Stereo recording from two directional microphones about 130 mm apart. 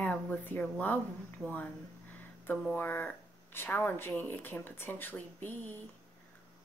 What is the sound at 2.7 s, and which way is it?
Speech, 15° left (ahead or behind).